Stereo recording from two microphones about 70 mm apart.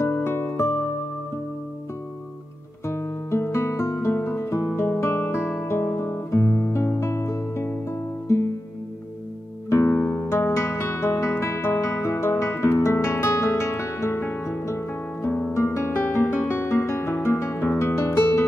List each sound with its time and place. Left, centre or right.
0.0 s music: left
2.9 s music: left
9.8 s music: left
10.2 s music: left
16.6 s music: left